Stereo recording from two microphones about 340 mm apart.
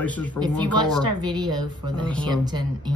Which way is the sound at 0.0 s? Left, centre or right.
Centre.